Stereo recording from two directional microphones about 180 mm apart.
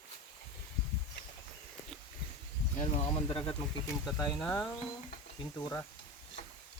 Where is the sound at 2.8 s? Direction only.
30° left (ahead or behind).